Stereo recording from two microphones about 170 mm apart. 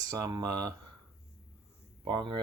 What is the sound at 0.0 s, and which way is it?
Speech, 20° right (ahead or behind).